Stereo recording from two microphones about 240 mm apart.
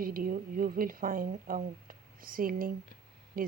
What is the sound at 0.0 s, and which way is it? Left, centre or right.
Speech, right.